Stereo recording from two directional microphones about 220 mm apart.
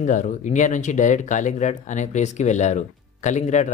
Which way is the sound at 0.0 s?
35° left (ahead or behind).